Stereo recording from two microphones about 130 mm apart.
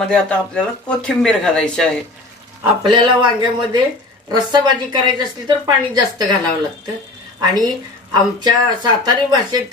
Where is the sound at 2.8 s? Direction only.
35° right (ahead or behind).